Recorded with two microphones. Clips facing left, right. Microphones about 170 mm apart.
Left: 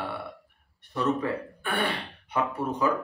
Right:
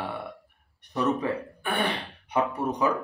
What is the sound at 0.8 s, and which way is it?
Speech, 20° right (ahead or behind).